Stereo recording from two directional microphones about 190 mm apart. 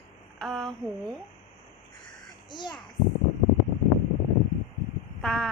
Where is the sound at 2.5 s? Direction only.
25° left (ahead or behind).